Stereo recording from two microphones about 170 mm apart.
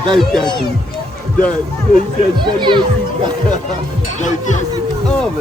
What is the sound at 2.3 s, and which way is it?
Speech, 25° right (ahead or behind).